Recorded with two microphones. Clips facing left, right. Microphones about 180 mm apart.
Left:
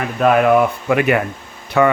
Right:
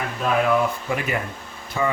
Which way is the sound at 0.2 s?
65° left (ahead or behind).